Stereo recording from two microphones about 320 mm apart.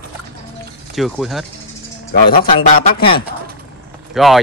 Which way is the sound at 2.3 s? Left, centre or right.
Left.